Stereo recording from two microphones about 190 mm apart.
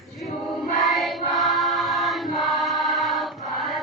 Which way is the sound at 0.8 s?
Centre (ahead or behind).